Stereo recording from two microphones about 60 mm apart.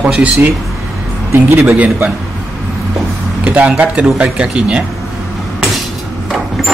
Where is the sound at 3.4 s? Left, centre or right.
Right.